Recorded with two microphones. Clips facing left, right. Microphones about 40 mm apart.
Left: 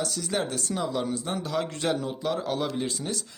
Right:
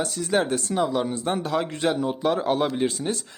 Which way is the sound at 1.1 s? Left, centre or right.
Right.